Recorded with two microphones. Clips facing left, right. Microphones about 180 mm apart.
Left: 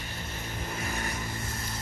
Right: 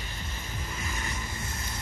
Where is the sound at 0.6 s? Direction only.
55° left (ahead or behind).